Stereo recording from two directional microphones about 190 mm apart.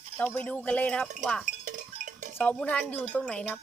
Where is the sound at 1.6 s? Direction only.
40° right (ahead or behind).